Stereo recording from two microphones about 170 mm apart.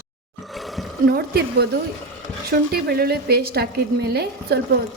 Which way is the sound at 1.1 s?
65° right (ahead or behind).